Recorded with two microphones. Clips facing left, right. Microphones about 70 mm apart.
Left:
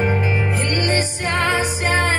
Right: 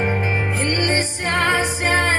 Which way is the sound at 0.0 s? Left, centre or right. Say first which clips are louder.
Left 1 dB; right.